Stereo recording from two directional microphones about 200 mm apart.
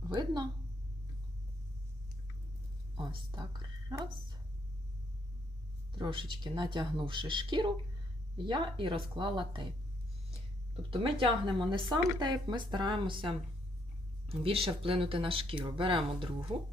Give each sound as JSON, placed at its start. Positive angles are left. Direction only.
{"t": 0.0, "sound": "speech", "side_deg": -20}
{"t": 3.0, "sound": "a woman's voice", "side_deg": -25}
{"t": 6.0, "sound": "speech", "side_deg": -25}
{"t": 10.9, "sound": "speech", "side_deg": -25}